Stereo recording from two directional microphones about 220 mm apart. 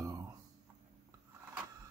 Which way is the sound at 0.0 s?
15° right (ahead or behind).